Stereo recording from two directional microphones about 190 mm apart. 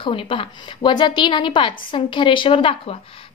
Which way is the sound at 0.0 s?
25° left (ahead or behind).